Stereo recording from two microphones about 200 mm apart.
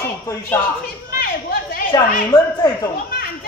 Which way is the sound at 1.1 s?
50° left (ahead or behind).